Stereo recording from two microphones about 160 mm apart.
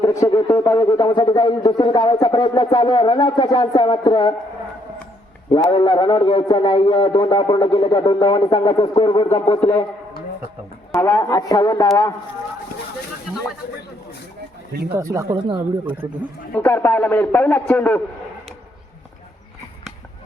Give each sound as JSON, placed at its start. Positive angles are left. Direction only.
{"t": 0.0, "sound": "speech", "side_deg": 20}
{"t": 5.7, "sound": "speech", "side_deg": 30}
{"t": 11.0, "sound": "speech", "side_deg": 20}
{"t": 14.7, "sound": "speech", "side_deg": -80}
{"t": 14.9, "sound": "speech", "side_deg": -20}
{"t": 16.6, "sound": "a man's voice", "side_deg": 15}